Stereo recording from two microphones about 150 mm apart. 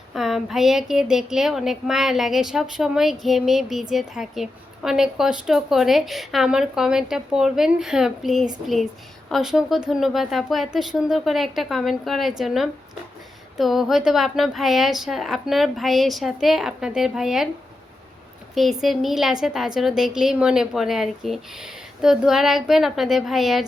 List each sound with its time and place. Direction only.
0.1 s a woman's voice: centre (ahead or behind)
18.5 s a woman's voice: centre (ahead or behind)